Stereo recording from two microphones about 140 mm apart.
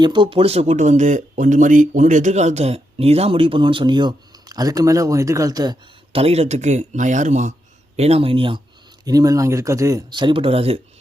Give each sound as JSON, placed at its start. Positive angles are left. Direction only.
{"t": 0.0, "sound": "speech", "side_deg": -35}
{"t": 6.1, "sound": "speech", "side_deg": -45}
{"t": 7.9, "sound": "speech", "side_deg": -50}
{"t": 9.0, "sound": "speech", "side_deg": -25}